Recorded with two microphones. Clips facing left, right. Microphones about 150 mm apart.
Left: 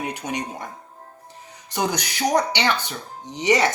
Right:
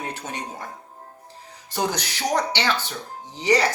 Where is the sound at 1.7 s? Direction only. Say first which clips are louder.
Left 1 dB; 15° left (ahead or behind).